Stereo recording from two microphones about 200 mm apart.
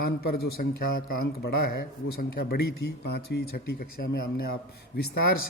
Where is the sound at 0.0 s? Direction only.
50° left (ahead or behind).